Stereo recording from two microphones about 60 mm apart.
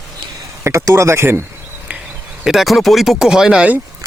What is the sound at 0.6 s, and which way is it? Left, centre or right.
Speech, right.